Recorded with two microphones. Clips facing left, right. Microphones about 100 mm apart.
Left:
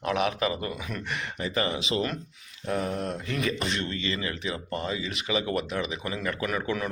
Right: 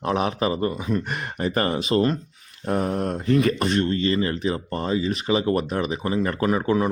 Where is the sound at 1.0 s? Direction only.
45° right (ahead or behind); by 6.9 s 30° right (ahead or behind).